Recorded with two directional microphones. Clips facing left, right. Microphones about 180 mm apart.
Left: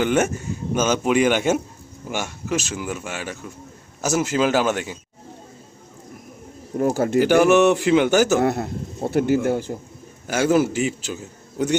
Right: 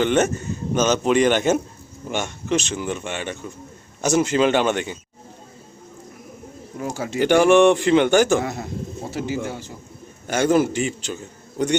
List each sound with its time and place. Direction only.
0.0 s a man's voice: 10° left (ahead or behind)
6.9 s speech: 55° left (ahead or behind)
7.2 s a man's voice: 5° left (ahead or behind)
8.4 s speech: 60° left (ahead or behind)
10.2 s a man's voice: 5° left (ahead or behind)